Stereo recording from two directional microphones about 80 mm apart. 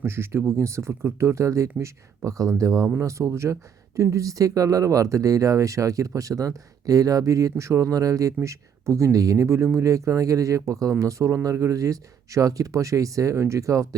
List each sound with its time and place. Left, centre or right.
0.0 s speech: right